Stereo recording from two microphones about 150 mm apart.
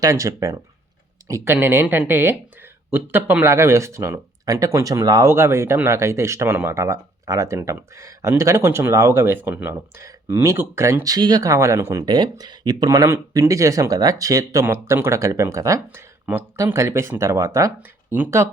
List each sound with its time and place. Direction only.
0.0 s speech: 20° right (ahead or behind)
12.0 s speech: 30° right (ahead or behind); by 18.4 s 15° right (ahead or behind)